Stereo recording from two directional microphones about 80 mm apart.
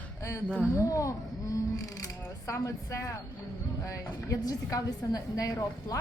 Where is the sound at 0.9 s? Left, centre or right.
Left.